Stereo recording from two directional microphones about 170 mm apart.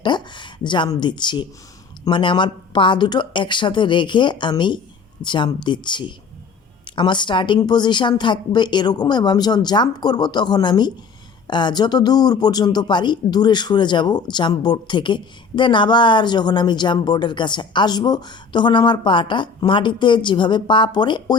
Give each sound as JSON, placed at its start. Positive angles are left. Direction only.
{"t": 0.0, "sound": "speech", "side_deg": 25}